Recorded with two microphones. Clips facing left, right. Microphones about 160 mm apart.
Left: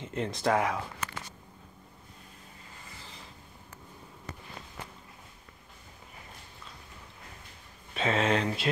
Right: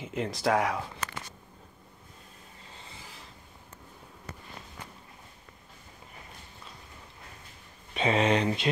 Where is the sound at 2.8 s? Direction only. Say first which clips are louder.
Right 2 dB; 25° right (ahead or behind).